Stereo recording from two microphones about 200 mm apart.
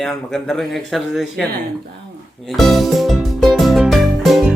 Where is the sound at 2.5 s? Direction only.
Centre (ahead or behind).